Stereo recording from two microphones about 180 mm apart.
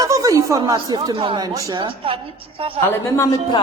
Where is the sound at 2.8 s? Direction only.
15° left (ahead or behind).